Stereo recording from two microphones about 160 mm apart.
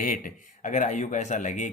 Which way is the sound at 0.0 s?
60° left (ahead or behind).